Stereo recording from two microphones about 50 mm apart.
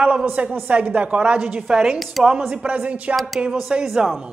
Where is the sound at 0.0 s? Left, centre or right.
Right.